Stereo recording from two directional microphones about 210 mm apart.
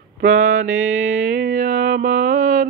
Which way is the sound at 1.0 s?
40° right (ahead or behind).